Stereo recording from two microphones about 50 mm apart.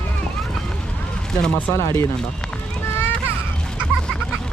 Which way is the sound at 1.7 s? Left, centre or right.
Left.